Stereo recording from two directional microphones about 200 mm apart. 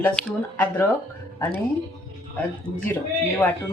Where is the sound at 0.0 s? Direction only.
5° left (ahead or behind).